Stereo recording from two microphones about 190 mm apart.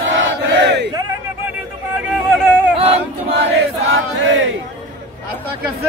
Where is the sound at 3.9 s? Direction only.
85° right.